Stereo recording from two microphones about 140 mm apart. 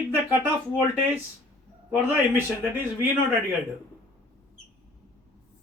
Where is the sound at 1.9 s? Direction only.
15° right (ahead or behind).